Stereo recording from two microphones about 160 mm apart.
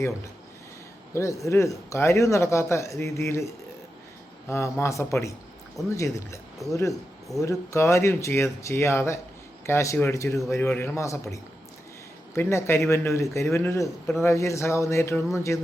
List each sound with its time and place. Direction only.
1.1 s speech: 20° left (ahead or behind)